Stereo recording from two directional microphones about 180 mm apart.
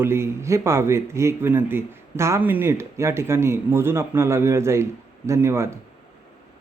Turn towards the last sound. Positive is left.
turn(degrees=-15)  # may be behind; listen again after turning